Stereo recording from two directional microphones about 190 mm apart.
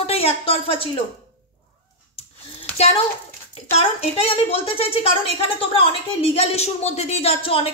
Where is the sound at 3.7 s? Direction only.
30° left (ahead or behind).